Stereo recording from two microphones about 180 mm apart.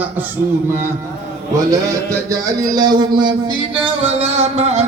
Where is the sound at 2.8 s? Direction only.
25° right (ahead or behind).